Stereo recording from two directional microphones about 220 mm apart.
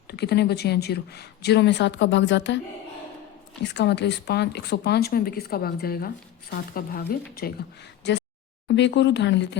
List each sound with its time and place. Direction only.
0.1 s speech: 50° left (ahead or behind)
3.6 s speech: 50° left (ahead or behind)